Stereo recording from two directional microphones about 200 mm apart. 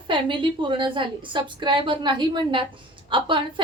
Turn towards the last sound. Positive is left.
turn(degrees=-25)  # may be behind; listen again after turning